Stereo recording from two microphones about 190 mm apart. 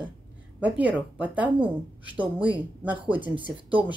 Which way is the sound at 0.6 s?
5° right (ahead or behind).